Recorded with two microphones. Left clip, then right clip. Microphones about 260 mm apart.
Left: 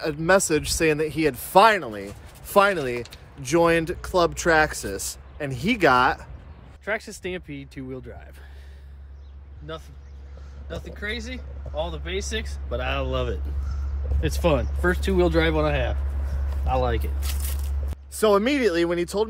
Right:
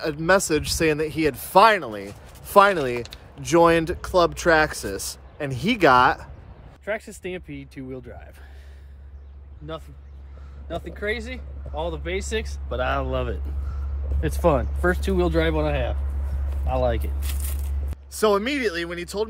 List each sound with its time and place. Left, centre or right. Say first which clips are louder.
0.0 s speech: even; centre
6.8 s speech: left 1 dB; centre
10.8 s speech: right 4 dB; right
12.6 s speech: right 3 dB; centre
13.0 s speech: even; centre
18.4 s speech: left 4 dB; centre